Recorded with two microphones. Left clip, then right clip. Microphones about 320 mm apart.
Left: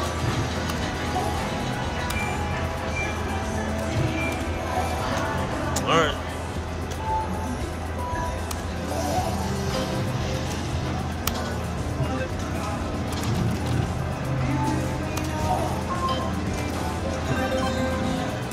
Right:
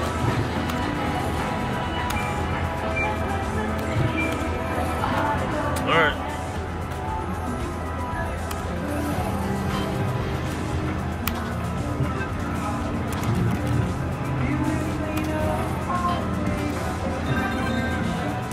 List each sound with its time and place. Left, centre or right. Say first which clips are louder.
5.9 s music: right 1 dB; centre